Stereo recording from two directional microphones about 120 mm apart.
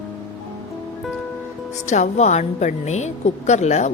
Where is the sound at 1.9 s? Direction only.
75° left (ahead or behind).